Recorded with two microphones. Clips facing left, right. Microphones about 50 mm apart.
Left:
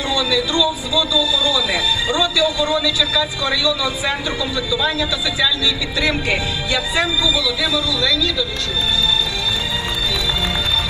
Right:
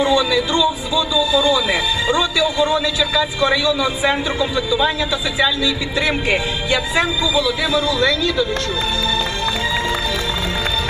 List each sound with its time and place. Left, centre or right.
0.0 s speech: right